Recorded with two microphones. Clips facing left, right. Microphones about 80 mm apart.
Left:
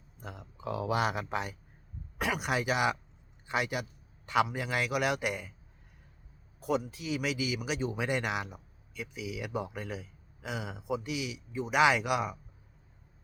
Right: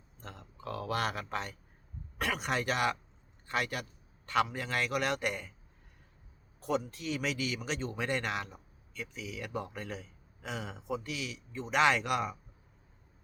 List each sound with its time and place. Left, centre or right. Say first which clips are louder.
0.2 s a man's voice: left 3 dB; centre
6.6 s speech: left 2 dB; centre